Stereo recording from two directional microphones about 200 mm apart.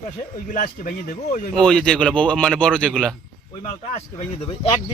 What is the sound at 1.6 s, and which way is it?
A man's voice, 5° left (ahead or behind).